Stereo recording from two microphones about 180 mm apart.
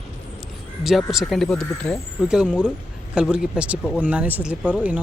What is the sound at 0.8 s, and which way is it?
Speech, centre (ahead or behind).